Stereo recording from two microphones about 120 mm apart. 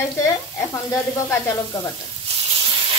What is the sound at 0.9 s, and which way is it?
Sizzle, 20° left (ahead or behind).